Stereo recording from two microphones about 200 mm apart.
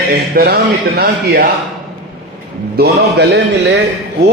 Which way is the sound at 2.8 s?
60° right (ahead or behind).